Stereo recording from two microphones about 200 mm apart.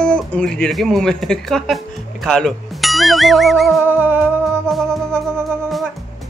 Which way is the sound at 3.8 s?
10° right (ahead or behind).